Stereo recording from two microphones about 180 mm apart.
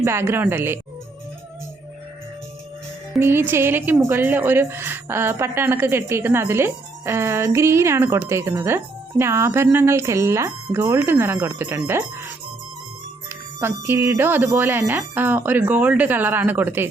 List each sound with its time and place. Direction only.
0.0 s a woman's voice: 15° right (ahead or behind)
3.2 s a woman's voice: 15° right (ahead or behind)
13.6 s a woman's voice: 15° right (ahead or behind)